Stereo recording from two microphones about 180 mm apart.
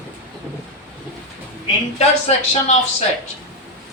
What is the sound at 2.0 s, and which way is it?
Speech, 35° left (ahead or behind).